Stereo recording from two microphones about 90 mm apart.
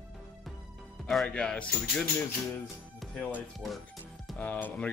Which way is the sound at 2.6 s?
Centre (ahead or behind).